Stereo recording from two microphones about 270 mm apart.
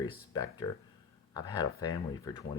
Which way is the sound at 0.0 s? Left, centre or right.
Centre.